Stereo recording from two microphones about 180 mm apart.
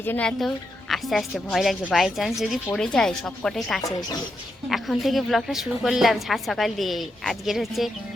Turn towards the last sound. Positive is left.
turn(degrees=0)  # may be behind; listen again after turning